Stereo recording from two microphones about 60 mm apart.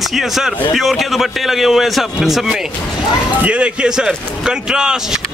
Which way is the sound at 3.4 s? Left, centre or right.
Centre.